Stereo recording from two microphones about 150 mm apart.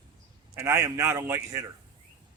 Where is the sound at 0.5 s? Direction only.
15° right (ahead or behind).